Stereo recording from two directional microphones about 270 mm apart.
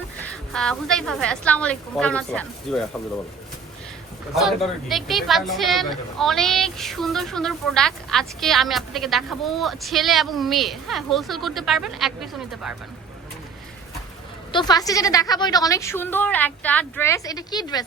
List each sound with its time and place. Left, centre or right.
0.2 s a woman's voice: centre
4.4 s a woman's voice: centre
14.5 s a woman's voice: centre